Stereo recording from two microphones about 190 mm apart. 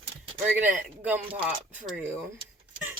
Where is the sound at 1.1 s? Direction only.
5° right (ahead or behind).